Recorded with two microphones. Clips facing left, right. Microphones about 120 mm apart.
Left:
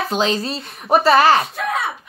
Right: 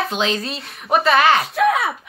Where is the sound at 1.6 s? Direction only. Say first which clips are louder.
Right 6 dB; centre (ahead or behind).